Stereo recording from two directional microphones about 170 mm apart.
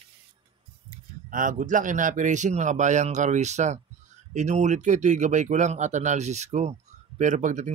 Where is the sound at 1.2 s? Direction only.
50° right (ahead or behind).